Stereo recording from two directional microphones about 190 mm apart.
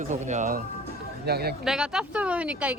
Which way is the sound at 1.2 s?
55° right (ahead or behind).